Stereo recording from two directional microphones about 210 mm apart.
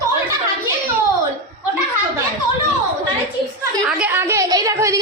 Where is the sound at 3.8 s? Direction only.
5° right (ahead or behind).